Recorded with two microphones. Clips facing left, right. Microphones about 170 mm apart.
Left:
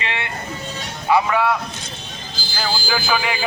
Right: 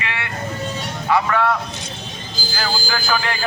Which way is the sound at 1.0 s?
10° left (ahead or behind).